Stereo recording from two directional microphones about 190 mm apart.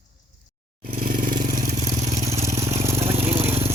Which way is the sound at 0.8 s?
45° right (ahead or behind).